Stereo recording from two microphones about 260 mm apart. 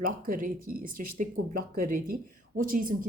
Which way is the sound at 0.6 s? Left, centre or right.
Right.